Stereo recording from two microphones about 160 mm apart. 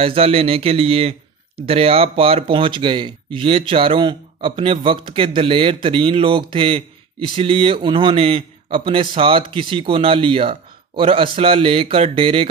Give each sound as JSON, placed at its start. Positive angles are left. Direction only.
{"t": 0.0, "sound": "a man's voice", "side_deg": -35}